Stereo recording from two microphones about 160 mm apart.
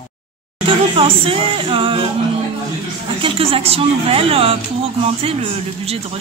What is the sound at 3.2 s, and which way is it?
A woman's voice, 35° right (ahead or behind).